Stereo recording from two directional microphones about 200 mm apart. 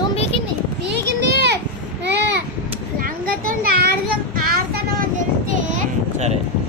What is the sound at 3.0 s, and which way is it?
Child singing, 50° right (ahead or behind).